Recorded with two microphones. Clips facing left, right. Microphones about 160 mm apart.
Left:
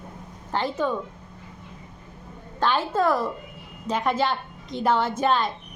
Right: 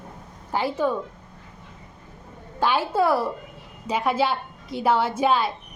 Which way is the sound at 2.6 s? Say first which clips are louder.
Right 1 dB; 10° right (ahead or behind).